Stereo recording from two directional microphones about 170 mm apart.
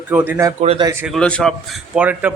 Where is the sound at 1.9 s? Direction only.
10° right (ahead or behind).